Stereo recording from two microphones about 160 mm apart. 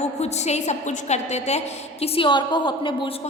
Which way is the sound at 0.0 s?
45° left (ahead or behind).